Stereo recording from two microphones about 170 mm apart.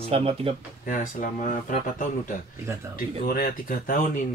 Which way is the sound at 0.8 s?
50° left (ahead or behind).